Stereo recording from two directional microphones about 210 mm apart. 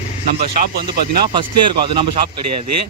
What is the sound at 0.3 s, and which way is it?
Speech, 50° right (ahead or behind).